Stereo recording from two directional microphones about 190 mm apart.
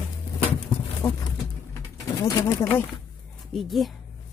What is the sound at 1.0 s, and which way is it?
Speech, 15° left (ahead or behind).